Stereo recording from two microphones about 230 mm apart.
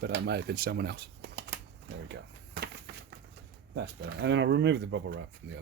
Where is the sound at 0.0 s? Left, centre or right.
Right.